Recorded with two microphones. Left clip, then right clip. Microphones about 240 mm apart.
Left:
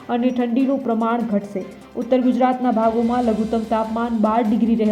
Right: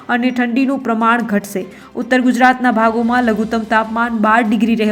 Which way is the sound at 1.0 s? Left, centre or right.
Centre.